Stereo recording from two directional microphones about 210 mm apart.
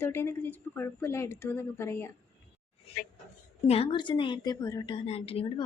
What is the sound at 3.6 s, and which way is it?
A woman's voice, 30° left (ahead or behind).